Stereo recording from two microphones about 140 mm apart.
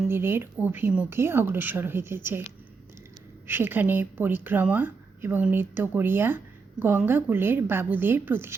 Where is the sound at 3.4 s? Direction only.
15° right (ahead or behind).